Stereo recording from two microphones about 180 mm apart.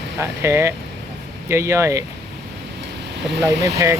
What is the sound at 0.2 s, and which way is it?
Speech, 15° right (ahead or behind).